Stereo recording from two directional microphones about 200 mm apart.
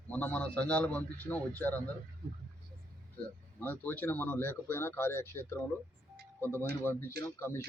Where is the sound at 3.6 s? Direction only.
10° left (ahead or behind).